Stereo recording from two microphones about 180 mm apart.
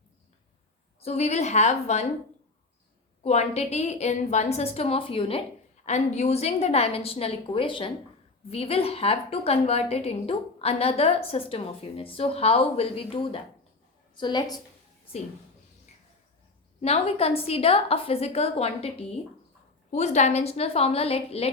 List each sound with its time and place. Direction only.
1.0 s a woman's voice: 35° left (ahead or behind)
3.2 s a woman's voice: 35° left (ahead or behind)
16.8 s a woman's voice: 35° left (ahead or behind)